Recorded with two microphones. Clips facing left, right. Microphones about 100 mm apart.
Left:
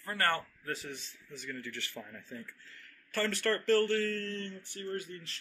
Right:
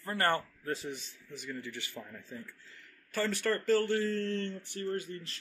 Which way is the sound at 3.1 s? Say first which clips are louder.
Even; 5° right (ahead or behind).